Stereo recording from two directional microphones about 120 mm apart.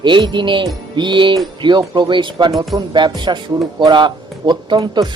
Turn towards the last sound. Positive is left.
turn(degrees=-35)  # may be behind; listen again after turning